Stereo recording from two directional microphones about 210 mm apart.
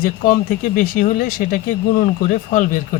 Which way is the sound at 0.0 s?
40° left (ahead or behind).